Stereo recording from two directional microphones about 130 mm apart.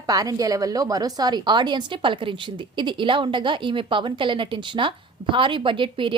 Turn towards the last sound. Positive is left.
turn(degrees=-40)  # may be behind; listen again after turning